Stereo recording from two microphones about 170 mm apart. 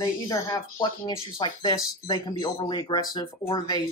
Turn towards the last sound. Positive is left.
turn(degrees=25)  # may be behind; listen again after turning